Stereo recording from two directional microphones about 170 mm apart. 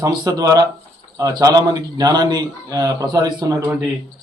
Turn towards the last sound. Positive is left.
turn(degrees=-20)  # may be behind; listen again after turning